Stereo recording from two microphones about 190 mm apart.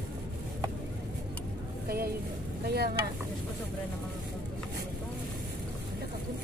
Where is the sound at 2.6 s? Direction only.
55° right (ahead or behind).